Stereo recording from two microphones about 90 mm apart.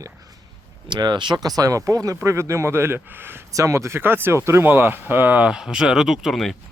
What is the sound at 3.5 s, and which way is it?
Speech, 35° right (ahead or behind).